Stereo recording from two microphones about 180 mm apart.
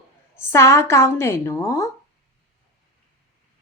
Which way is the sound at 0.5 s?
15° left (ahead or behind).